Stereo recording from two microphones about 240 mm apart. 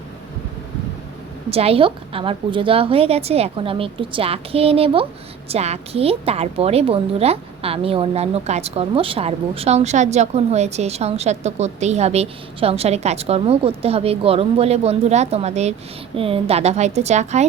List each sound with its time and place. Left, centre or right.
1.5 s a woman's voice: right